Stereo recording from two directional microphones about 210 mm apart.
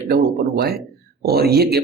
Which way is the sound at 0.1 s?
45° right (ahead or behind).